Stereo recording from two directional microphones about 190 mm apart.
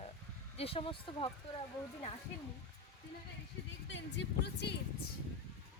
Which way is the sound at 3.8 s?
70° left (ahead or behind).